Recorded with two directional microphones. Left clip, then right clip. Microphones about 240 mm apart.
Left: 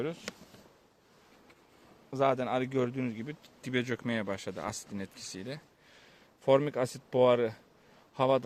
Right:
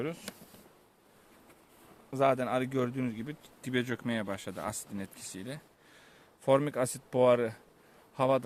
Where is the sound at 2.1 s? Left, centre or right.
Centre.